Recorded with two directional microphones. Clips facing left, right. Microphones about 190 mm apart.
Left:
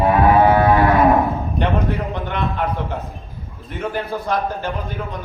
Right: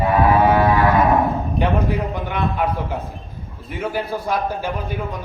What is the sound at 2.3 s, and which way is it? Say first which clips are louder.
Speech: right 1 dB; 10° right (ahead or behind).